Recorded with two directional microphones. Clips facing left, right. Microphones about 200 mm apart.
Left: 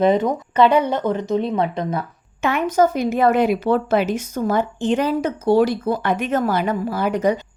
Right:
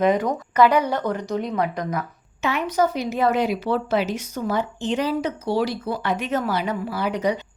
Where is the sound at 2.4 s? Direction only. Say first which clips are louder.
Left 4 dB; 50° left (ahead or behind).